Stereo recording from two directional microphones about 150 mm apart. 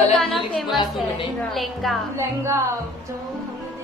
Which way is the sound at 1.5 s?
Centre (ahead or behind).